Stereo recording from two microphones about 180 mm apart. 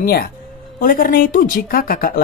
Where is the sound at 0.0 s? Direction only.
55° left (ahead or behind).